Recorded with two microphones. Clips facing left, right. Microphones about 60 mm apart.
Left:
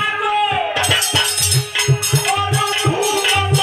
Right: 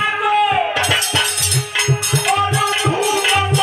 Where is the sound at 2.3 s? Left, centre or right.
Centre.